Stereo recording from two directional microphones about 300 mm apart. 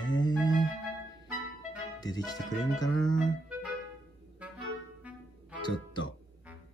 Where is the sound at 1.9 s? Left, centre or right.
Centre.